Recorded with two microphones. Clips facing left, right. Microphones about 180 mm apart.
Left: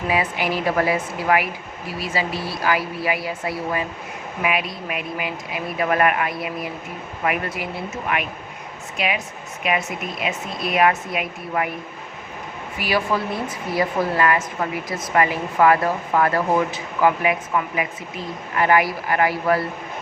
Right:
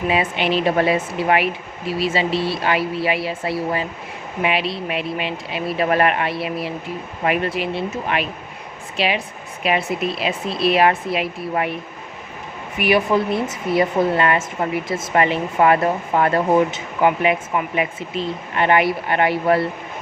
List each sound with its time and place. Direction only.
0.1 s speech: 25° right (ahead or behind)
12.8 s speech: 20° right (ahead or behind)